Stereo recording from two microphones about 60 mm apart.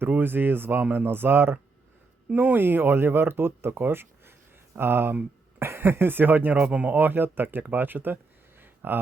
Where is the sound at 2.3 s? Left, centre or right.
Right.